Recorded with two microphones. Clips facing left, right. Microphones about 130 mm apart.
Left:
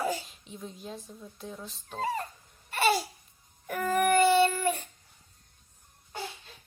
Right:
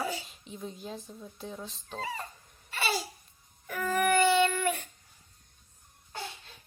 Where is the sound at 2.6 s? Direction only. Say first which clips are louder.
Left 6 dB; 50° left (ahead or behind).